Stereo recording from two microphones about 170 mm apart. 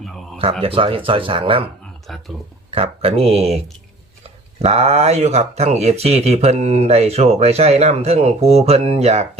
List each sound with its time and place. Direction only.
0.6 s speech: 30° right (ahead or behind)
2.6 s speech: 35° right (ahead or behind)
4.6 s speech: 40° right (ahead or behind)